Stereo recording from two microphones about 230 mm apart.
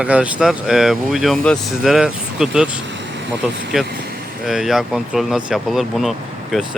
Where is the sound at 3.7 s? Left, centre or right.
Centre.